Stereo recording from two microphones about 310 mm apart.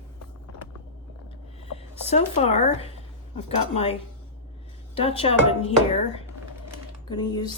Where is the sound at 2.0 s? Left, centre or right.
Left.